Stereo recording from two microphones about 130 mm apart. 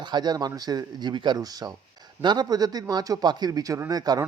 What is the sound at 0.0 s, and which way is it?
Speech, 35° right (ahead or behind).